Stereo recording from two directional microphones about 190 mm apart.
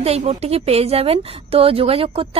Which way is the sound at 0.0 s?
35° right (ahead or behind).